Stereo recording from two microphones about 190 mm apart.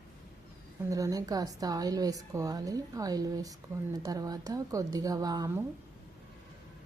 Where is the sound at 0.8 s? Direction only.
15° right (ahead or behind).